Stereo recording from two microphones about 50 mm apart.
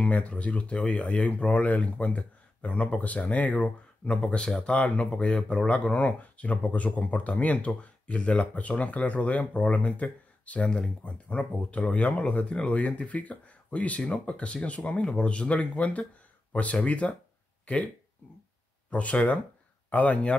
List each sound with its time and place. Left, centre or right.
0.0 s speech: left
4.2 s speech: centre
18.9 s speech: left